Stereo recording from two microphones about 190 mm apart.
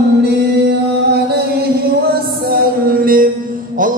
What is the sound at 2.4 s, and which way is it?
Music, 50° right (ahead or behind).